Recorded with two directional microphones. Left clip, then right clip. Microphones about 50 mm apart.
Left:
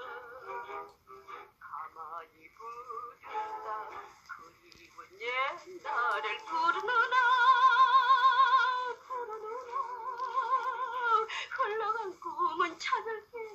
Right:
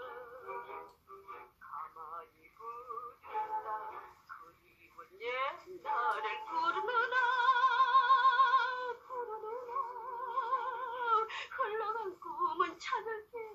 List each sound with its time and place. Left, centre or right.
0.0 s music: left
2.6 s synthetic singing: left
3.3 s music: left
5.2 s synthetic singing: left
9.7 s a sound: left